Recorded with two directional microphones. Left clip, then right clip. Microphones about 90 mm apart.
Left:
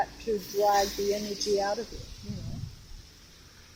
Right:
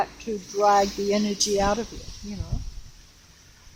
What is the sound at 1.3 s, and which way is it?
Speech, 55° right (ahead or behind).